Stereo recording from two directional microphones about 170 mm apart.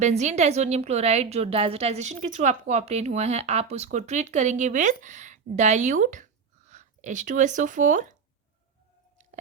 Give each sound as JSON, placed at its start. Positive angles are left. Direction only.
{"t": 0.0, "sound": "a woman's voice", "side_deg": -45}